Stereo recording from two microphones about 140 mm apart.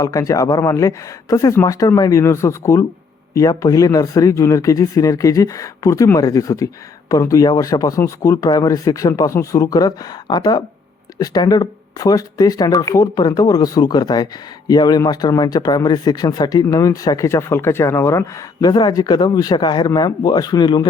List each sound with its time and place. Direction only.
0.0 s speech: 25° left (ahead or behind)